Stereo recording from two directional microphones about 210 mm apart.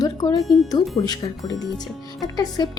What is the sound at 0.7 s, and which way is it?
A woman's voice, 20° left (ahead or behind).